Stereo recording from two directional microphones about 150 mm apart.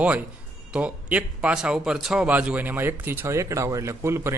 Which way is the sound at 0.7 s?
10° right (ahead or behind).